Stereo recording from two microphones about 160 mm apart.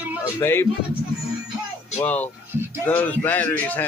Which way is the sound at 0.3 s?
15° left (ahead or behind).